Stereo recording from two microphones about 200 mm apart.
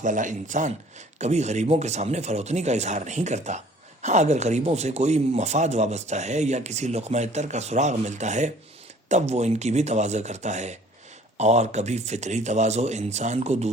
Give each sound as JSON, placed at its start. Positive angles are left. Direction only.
{"t": 0.0, "sound": "speech", "side_deg": -40}